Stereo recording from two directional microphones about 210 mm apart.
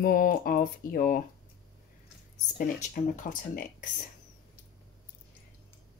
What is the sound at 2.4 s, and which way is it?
Cutlery, 35° left (ahead or behind).